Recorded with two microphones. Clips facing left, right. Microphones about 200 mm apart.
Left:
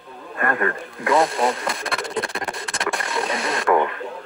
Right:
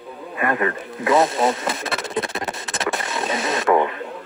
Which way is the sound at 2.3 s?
25° right (ahead or behind).